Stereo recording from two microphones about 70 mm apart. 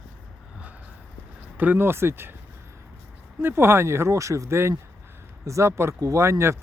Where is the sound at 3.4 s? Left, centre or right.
Right.